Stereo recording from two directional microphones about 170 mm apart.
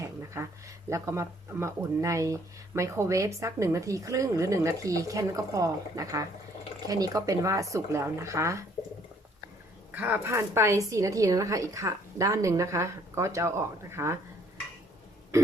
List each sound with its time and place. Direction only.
0.0 s a sound: 15° right (ahead or behind)
0.9 s speech: 15° right (ahead or behind)
9.9 s speech: 10° right (ahead or behind)